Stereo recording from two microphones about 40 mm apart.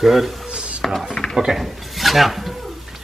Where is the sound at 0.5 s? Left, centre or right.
Right.